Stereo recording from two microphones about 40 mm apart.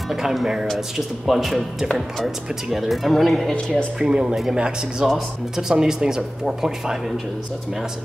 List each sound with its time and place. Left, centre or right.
0.1 s speech: centre
4.0 s speech: centre
5.0 s speech: centre